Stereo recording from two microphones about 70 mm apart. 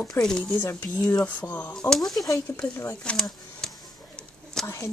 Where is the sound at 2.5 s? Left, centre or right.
Left.